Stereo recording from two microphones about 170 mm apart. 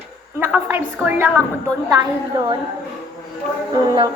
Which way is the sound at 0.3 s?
10° right (ahead or behind).